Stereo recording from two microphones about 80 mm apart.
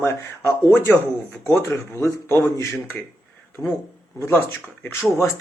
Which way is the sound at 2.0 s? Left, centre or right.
Left.